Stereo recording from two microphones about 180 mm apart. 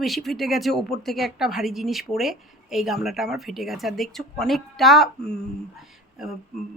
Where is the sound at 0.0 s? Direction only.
Centre (ahead or behind).